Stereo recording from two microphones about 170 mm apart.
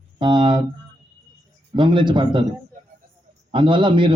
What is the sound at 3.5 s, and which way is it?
Speech, 30° right (ahead or behind).